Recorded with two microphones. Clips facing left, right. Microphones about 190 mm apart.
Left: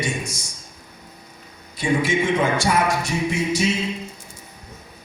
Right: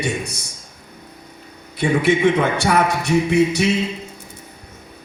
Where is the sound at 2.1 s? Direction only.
65° right (ahead or behind).